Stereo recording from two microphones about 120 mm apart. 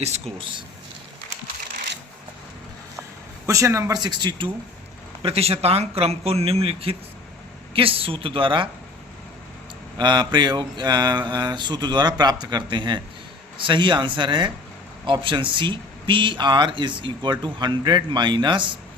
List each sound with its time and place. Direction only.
0.3 s speech: 45° right (ahead or behind)
3.4 s speech: 25° right (ahead or behind)
5.2 s speech: 55° right (ahead or behind)
10.0 s speech: 40° right (ahead or behind)